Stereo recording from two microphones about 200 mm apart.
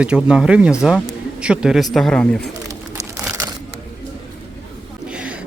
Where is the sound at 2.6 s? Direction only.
15° right (ahead or behind).